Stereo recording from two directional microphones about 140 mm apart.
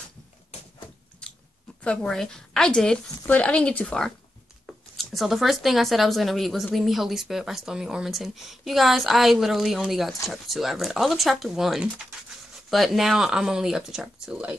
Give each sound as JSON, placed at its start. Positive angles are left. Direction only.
{"t": 1.8, "sound": "speech", "side_deg": 10}